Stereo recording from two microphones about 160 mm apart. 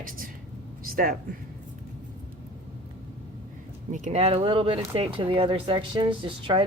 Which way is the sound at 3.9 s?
50° right (ahead or behind).